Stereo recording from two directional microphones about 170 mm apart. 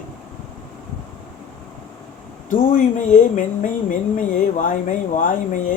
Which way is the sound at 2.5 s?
50° left (ahead or behind).